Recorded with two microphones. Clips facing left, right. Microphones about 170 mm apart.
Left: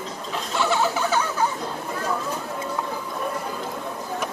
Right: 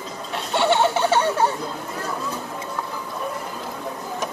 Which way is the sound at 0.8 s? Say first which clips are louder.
Right 4 dB; 30° right (ahead or behind).